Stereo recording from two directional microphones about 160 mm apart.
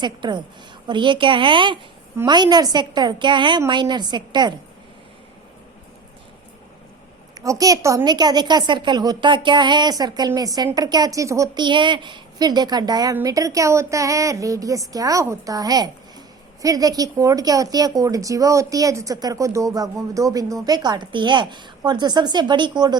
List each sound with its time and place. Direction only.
0.0 s a woman's voice: 30° right (ahead or behind)
7.3 s a woman's voice: 20° right (ahead or behind)